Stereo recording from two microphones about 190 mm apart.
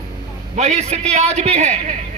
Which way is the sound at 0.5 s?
35° right (ahead or behind).